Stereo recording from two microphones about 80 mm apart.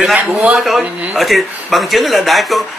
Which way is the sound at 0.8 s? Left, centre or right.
Centre.